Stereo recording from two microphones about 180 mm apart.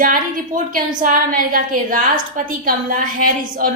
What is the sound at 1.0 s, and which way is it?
A woman's voice, 50° right (ahead or behind).